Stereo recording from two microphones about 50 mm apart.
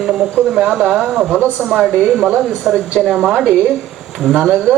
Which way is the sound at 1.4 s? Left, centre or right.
Right.